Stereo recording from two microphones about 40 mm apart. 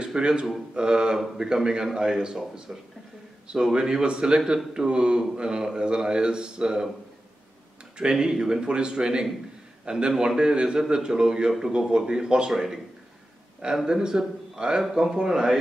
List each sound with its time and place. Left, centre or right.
0.0 s a man's voice: right
8.0 s a man's voice: right
13.8 s a man's voice: centre